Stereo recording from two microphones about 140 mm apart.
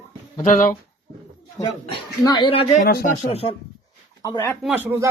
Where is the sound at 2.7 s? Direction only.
80° left.